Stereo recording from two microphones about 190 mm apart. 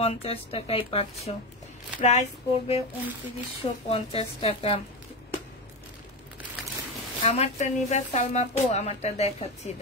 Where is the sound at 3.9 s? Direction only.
30° left (ahead or behind).